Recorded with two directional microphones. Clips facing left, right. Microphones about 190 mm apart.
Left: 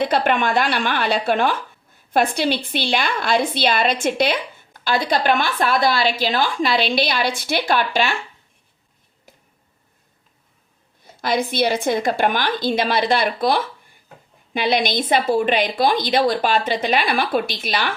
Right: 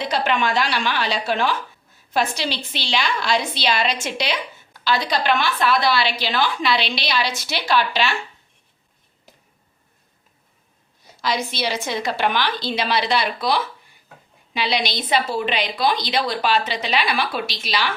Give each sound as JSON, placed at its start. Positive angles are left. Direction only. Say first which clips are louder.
{"t": 0.0, "sound": "a woman's voice", "louder": "left 3 dB", "side_deg": 55}
{"t": 11.0, "sound": "a woman's voice", "louder": "left 3 dB", "side_deg": 55}